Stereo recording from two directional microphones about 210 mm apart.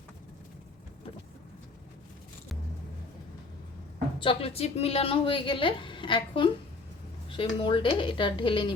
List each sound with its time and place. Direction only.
4.2 s a woman's voice: 25° left (ahead or behind)